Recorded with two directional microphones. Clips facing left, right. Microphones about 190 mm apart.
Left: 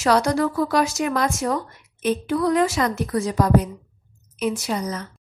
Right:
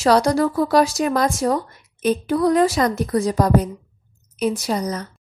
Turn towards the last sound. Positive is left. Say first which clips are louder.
# right 3 dB
turn(degrees=-40)  # may be behind; listen again after turning